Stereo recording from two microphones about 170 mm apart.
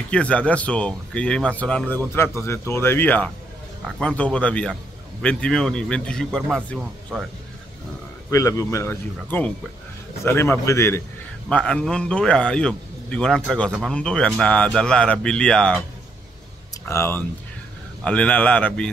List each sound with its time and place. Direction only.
0.1 s a man's voice: 5° left (ahead or behind)
8.3 s speech: 15° left (ahead or behind)
11.4 s a man's voice: 5° left (ahead or behind)
16.8 s speech: 15° left (ahead or behind)